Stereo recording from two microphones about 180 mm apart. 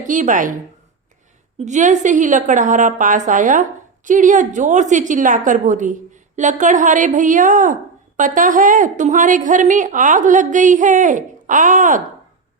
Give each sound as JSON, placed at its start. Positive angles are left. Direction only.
{"t": 0.1, "sound": "a woman's voice", "side_deg": -45}
{"t": 1.6, "sound": "a woman's voice", "side_deg": -40}